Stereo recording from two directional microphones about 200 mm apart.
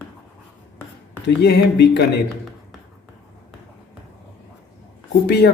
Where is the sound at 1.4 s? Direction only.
55° left (ahead or behind).